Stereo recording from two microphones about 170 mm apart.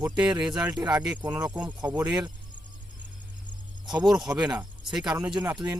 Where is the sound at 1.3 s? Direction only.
10° right (ahead or behind).